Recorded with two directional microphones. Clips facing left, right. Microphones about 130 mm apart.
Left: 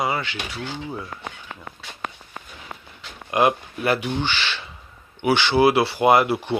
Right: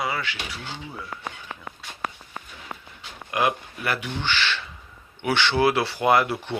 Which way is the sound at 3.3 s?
25° left (ahead or behind).